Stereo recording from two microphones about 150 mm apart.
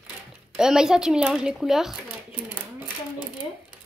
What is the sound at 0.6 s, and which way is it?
A woman's voice, 5° right (ahead or behind).